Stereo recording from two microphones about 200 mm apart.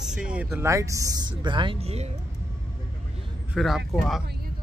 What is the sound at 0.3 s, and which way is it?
Speech, 5° right (ahead or behind).